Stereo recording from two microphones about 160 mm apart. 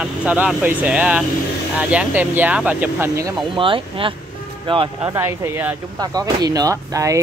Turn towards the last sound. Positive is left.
turn(degrees=-20)  # may be behind; listen again after turning